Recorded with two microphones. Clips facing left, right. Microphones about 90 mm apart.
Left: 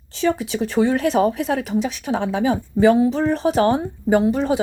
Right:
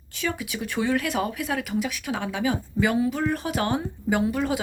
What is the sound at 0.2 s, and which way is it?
Speech, 30° left (ahead or behind).